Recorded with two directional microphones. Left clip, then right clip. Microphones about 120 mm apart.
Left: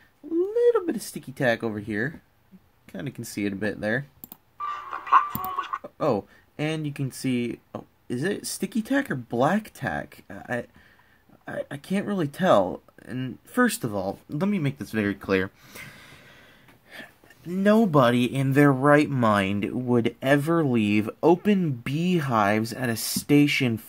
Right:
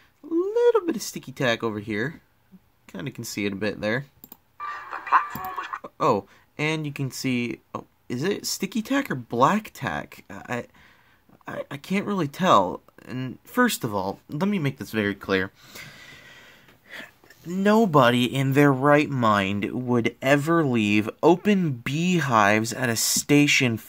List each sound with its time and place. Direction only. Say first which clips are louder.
0.5 s speech: right 1 dB; 35° right (ahead or behind)
15.0 s speech: even; 15° right (ahead or behind)
15.7 s a sound: right 1 dB; 5° left (ahead or behind)
16.9 s speech: right 3 dB; 40° right (ahead or behind)
18.9 s speech: even; 10° right (ahead or behind); by 23.9 s 35° right (ahead or behind)